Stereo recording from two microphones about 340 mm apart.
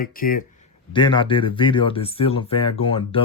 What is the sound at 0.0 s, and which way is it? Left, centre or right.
Speech, left.